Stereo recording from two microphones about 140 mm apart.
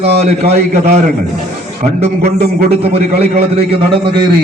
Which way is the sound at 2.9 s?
45° right (ahead or behind).